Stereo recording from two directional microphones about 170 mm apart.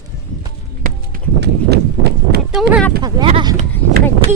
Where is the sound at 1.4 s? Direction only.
70° right (ahead or behind).